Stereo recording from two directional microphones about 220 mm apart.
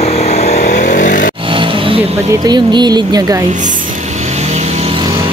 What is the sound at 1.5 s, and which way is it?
Vehicle, 25° right (ahead or behind).